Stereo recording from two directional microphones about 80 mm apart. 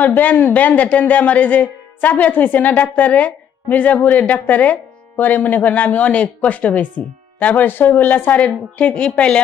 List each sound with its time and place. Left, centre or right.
0.0 s a man's voice: left